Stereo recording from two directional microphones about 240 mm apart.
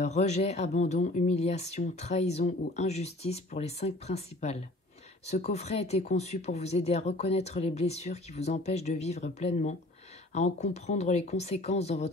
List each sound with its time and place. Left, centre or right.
0.0 s speech: left